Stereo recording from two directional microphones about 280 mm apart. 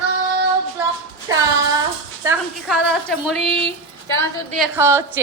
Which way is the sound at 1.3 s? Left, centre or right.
Centre.